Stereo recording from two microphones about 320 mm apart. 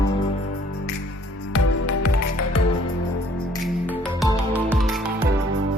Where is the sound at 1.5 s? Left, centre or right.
Left.